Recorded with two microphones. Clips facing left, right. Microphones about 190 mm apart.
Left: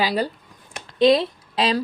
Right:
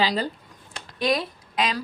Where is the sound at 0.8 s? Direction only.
25° left (ahead or behind).